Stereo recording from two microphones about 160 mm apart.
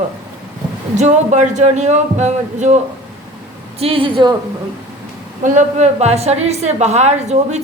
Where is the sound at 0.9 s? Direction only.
45° right (ahead or behind).